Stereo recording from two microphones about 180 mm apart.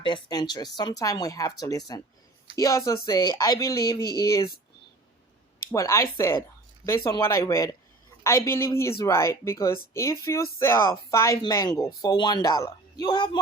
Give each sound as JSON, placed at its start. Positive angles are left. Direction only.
{"t": 0.0, "sound": "speech", "side_deg": 25}
{"t": 5.7, "sound": "speech", "side_deg": 15}